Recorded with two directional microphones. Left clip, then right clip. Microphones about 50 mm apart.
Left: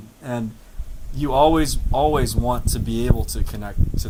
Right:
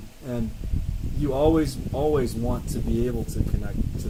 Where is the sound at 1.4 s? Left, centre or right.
Left.